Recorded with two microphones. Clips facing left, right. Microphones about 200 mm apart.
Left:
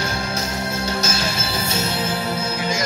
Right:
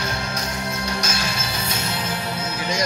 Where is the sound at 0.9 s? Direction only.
25° left (ahead or behind).